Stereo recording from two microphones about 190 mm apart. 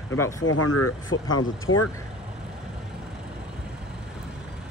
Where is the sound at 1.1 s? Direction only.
90° left.